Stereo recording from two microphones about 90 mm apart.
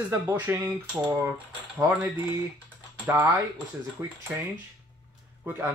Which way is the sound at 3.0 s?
20° right (ahead or behind).